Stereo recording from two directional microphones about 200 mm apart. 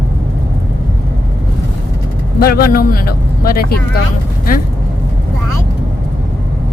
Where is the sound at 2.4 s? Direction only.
50° left (ahead or behind).